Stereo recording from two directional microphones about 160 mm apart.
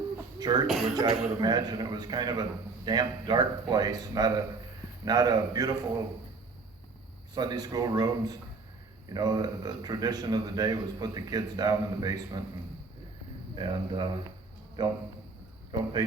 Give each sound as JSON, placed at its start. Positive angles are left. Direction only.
{"t": 0.3, "sound": "a man's voice", "side_deg": -25}
{"t": 7.3, "sound": "a man's voice", "side_deg": -25}
{"t": 13.6, "sound": "a man's voice", "side_deg": -30}